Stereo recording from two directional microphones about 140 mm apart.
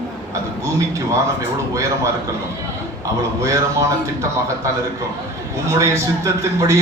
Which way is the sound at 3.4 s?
20° right (ahead or behind).